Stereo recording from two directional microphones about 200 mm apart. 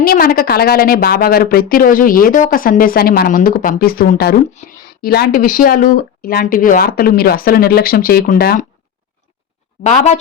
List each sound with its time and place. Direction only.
0.0 s speech: 50° left (ahead or behind)
9.8 s speech: 35° left (ahead or behind)